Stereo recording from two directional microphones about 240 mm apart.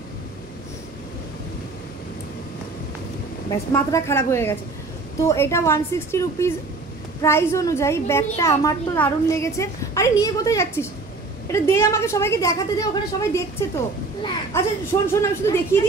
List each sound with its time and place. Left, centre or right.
3.4 s a woman's voice: centre